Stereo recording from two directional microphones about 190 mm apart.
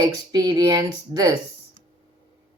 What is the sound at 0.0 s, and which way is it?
Speech, 20° right (ahead or behind).